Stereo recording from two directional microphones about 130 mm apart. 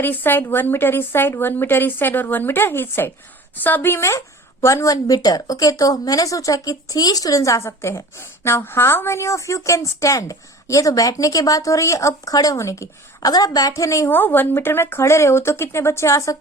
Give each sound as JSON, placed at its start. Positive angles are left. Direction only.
{"t": 0.0, "sound": "a woman's voice", "side_deg": 15}